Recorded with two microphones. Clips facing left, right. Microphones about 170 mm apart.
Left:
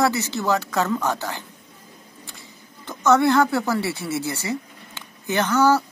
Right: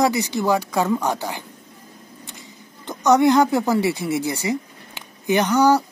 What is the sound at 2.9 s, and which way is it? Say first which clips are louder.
A woman's voice: right 2 dB; 15° right (ahead or behind).